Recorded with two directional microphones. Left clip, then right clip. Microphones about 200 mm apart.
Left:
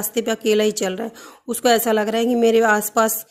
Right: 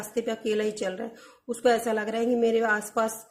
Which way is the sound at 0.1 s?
45° left (ahead or behind).